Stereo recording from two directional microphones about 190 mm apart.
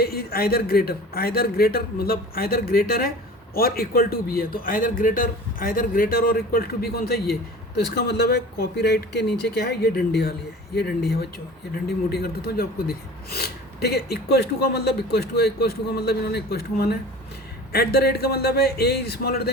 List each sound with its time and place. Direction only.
0.0 s a man's voice: 55° left (ahead or behind)